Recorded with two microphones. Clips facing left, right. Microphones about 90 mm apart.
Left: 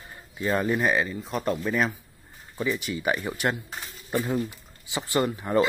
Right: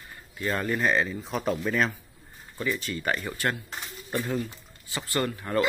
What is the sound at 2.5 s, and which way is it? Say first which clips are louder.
Speech: left 2 dB; 15° left (ahead or behind).